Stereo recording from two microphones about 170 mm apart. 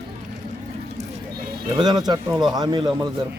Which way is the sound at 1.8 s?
25° right (ahead or behind).